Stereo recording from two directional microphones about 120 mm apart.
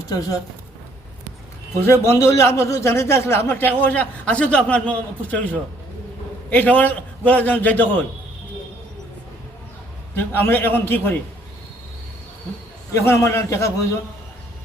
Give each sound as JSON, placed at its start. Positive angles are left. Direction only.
{"t": 1.8, "sound": "a man's voice", "side_deg": 20}
{"t": 6.5, "sound": "a man's voice", "side_deg": 15}
{"t": 10.2, "sound": "a man's voice", "side_deg": 15}
{"t": 12.9, "sound": "a man's voice", "side_deg": 25}